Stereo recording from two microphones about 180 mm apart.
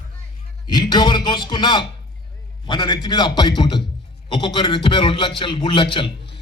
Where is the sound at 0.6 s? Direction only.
25° left (ahead or behind).